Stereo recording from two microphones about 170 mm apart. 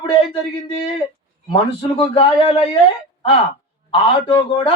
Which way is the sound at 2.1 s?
35° left (ahead or behind).